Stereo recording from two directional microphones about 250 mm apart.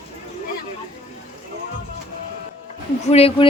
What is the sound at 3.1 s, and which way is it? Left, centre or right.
Speech, left.